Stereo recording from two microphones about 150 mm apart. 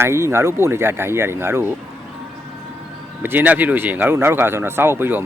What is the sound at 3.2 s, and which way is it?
Speech, 10° right (ahead or behind).